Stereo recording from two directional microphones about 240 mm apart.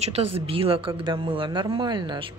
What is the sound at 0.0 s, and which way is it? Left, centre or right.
Speech, right.